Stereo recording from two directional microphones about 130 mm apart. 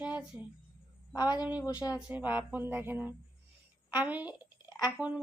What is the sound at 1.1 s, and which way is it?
Speech, 30° left (ahead or behind).